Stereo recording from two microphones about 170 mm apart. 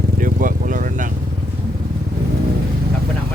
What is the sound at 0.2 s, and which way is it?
Vehicle, 55° right (ahead or behind).